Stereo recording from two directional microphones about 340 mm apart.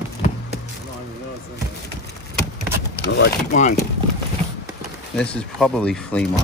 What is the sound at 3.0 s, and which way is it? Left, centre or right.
Speech, left.